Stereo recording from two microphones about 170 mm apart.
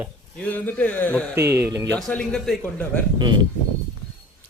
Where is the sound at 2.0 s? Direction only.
5° left (ahead or behind).